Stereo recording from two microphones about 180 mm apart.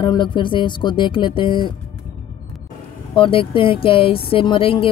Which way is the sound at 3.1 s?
30° left (ahead or behind).